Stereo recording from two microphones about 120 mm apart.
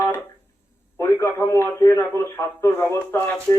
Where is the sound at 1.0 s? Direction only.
20° left (ahead or behind).